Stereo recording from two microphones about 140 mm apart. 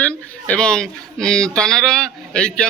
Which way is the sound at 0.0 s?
10° left (ahead or behind).